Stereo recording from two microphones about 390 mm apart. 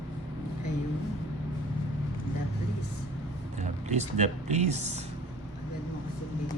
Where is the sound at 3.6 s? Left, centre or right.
Centre.